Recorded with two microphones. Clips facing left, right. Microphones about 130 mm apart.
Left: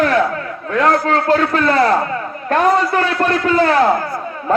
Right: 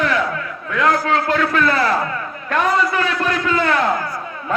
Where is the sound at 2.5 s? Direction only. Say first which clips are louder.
Left 4 dB; 40° left (ahead or behind).